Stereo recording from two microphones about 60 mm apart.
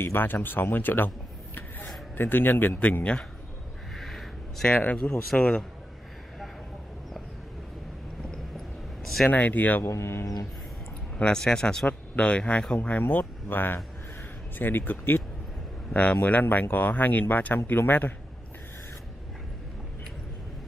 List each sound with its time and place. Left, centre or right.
0.0 s speech: left
2.8 s speech: left
3.9 s a sound: centre
4.6 s speech: left
9.3 s speech: left
9.8 s speech: left
11.1 s speech: centre
13.0 s speech: left